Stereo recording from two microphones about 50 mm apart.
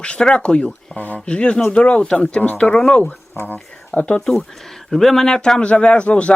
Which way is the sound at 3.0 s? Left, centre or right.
Left.